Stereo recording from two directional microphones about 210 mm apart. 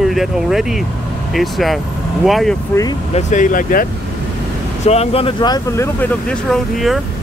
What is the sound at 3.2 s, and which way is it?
Speech, 35° left (ahead or behind).